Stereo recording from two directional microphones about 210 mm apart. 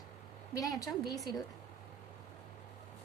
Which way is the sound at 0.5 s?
15° left (ahead or behind).